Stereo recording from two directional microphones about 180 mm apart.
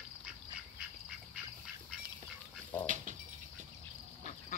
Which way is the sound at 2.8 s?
45° right (ahead or behind).